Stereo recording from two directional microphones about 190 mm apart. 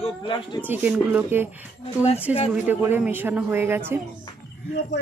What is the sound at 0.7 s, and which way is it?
Speech, 10° right (ahead or behind).